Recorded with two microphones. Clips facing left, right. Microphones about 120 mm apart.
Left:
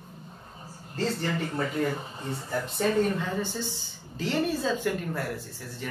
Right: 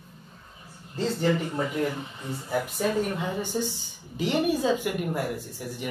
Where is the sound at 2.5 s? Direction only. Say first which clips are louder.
Even; 10° right (ahead or behind).